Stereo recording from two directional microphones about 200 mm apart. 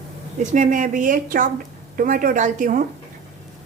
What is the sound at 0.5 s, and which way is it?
A woman's voice, 40° right (ahead or behind).